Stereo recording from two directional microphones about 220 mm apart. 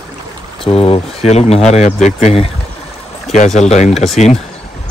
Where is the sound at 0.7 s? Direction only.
25° left (ahead or behind).